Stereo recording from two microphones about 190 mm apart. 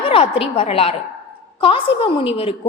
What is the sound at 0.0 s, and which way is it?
A woman's voice, 30° left (ahead or behind).